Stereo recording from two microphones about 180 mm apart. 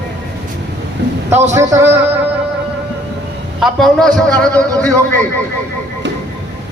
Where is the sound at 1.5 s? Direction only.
15° right (ahead or behind).